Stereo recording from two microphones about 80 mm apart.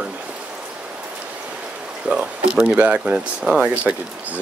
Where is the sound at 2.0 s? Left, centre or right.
Centre.